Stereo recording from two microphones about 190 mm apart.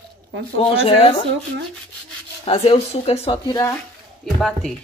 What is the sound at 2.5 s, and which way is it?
Speech, 30° left (ahead or behind).